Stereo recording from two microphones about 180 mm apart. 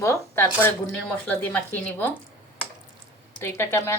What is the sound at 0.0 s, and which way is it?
Speech, 15° left (ahead or behind).